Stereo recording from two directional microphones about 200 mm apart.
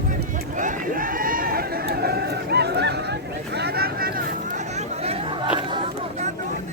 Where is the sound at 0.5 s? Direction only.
40° right (ahead or behind).